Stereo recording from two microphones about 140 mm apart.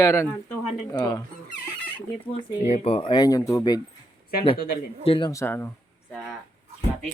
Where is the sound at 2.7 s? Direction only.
45° left (ahead or behind); by 3.8 s 25° left (ahead or behind).